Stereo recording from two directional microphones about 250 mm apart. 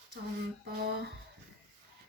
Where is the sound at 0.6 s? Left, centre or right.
Right.